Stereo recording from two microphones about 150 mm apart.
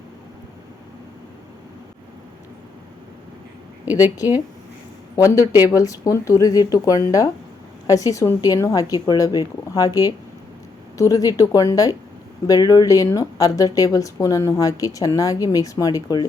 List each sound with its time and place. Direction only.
3.9 s speech: 25° left (ahead or behind)